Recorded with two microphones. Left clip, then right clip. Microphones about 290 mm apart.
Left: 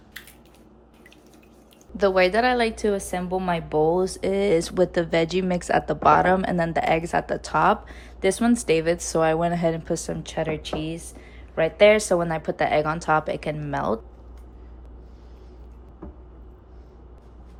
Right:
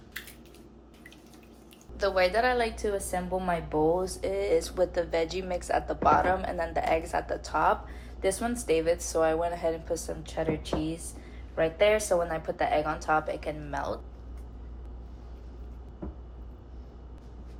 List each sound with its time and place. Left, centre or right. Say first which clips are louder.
2.0 s speech: left 6 dB; left
11.5 s speech: left 7 dB; left